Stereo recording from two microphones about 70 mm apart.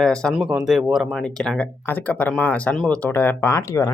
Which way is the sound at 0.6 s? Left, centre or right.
Centre.